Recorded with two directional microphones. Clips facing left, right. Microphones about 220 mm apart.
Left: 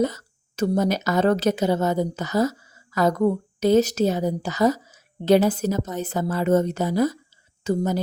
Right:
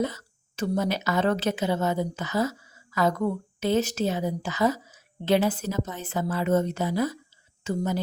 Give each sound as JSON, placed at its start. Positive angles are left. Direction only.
{"t": 0.0, "sound": "a woman's voice", "side_deg": 45}